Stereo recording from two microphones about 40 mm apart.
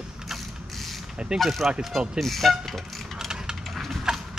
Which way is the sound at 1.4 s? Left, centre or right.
Centre.